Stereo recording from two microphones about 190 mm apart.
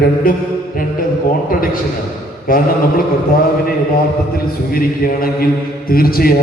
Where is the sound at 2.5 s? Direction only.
50° left (ahead or behind).